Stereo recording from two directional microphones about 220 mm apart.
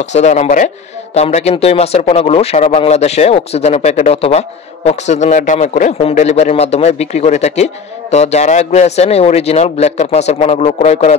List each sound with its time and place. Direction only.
0.0 s a man's voice: 30° left (ahead or behind)